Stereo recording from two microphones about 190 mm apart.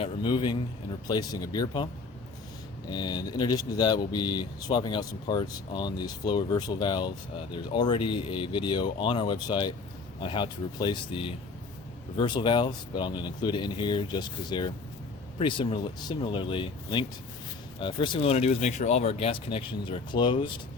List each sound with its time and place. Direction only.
0.0 s speech: 25° left (ahead or behind)
2.9 s speech: 20° left (ahead or behind)